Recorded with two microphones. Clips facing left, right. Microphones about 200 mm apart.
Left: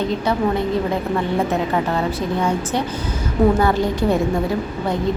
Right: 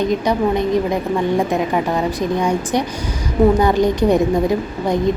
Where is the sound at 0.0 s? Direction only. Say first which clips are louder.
Right 3 dB; 15° right (ahead or behind).